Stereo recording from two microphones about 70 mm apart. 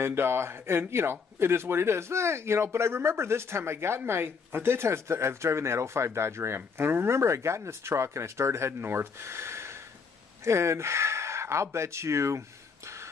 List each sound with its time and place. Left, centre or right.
0.0 s speech: right